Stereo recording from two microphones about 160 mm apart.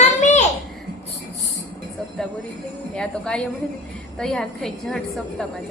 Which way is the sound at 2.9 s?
5° left (ahead or behind).